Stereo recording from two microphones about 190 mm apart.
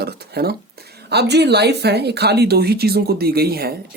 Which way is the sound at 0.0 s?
55° right (ahead or behind).